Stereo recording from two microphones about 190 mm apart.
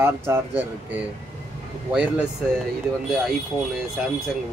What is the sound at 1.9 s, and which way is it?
Speech, 5° right (ahead or behind).